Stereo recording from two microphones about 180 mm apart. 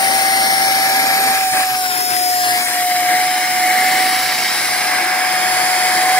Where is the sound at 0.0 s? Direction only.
20° left (ahead or behind).